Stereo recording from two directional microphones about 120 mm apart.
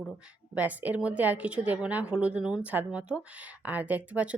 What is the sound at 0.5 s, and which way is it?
A woman's voice, 15° right (ahead or behind).